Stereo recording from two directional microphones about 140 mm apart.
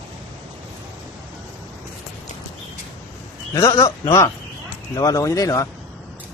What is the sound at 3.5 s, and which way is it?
Speech, 20° left (ahead or behind).